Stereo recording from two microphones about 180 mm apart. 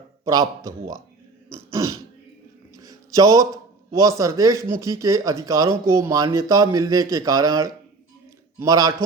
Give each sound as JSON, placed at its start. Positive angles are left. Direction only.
{"t": 0.3, "sound": "a man's voice", "side_deg": -20}
{"t": 1.5, "sound": "throat clearing", "side_deg": -15}
{"t": 2.7, "sound": "a man's voice", "side_deg": -20}